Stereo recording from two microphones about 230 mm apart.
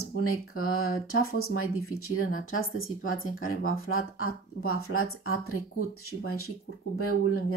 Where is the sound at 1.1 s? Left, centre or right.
Left.